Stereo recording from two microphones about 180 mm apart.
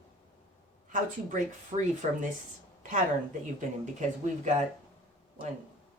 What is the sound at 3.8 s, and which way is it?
Speech, 40° right (ahead or behind).